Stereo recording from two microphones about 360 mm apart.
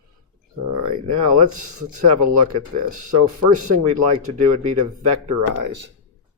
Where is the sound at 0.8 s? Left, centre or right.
Right.